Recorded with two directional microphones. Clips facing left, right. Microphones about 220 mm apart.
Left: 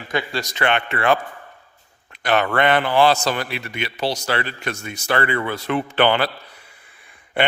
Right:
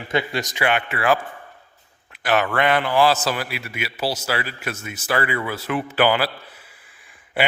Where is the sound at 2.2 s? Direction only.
5° right (ahead or behind).